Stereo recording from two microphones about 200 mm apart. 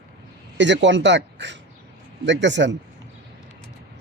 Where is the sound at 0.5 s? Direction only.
65° right (ahead or behind).